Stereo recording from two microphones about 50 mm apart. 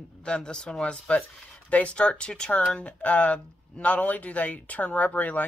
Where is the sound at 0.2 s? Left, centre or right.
Centre.